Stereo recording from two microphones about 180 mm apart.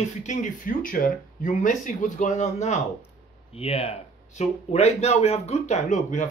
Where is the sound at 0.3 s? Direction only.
45° left (ahead or behind).